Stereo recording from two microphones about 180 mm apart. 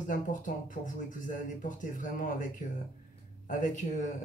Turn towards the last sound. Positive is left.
turn(degrees=45)  # may be behind; listen again after turning